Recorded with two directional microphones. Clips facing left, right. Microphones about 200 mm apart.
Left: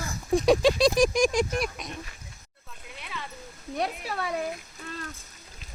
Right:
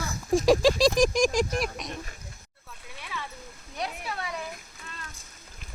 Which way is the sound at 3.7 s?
35° left (ahead or behind).